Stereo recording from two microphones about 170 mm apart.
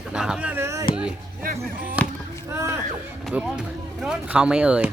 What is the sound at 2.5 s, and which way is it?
Speech, 15° right (ahead or behind).